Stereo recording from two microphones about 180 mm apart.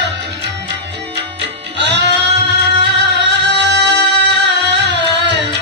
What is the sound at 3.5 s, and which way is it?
Music, 70° right (ahead or behind).